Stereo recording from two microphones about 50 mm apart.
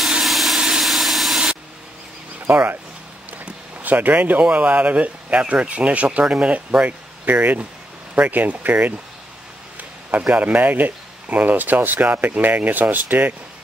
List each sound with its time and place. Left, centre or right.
0.2 s a sound: centre
2.4 s speech: right
3.8 s speech: right
10.4 s speech: right